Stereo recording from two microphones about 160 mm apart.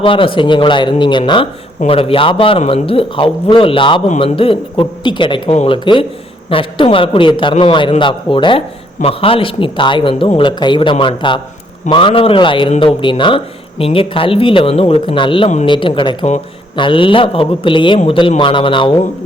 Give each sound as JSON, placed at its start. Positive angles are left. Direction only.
{"t": 0.0, "sound": "a man's voice", "side_deg": 35}